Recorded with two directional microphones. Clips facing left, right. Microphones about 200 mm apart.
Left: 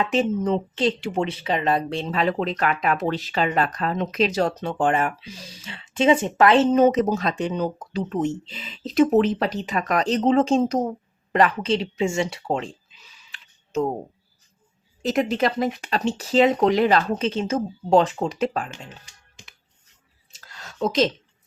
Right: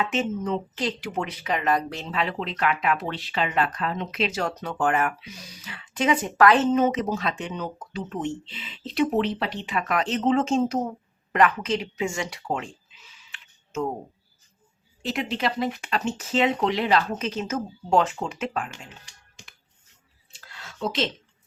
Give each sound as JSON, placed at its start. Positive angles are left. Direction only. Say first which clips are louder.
{"t": 0.0, "sound": "a woman's voice", "louder": "left 5 dB", "side_deg": 35}
{"t": 2.0, "sound": "a woman's voice", "louder": "left 5 dB", "side_deg": 40}
{"t": 13.3, "sound": "a sound", "louder": "left 6 dB", "side_deg": 35}
{"t": 15.0, "sound": "speech", "louder": "left 6 dB", "side_deg": 45}
{"t": 17.2, "sound": "speech", "louder": "left 5 dB", "side_deg": 30}
{"t": 20.3, "sound": "a sound", "louder": "left 2 dB", "side_deg": 40}